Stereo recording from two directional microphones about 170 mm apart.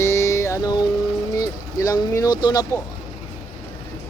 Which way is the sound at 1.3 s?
20° left (ahead or behind).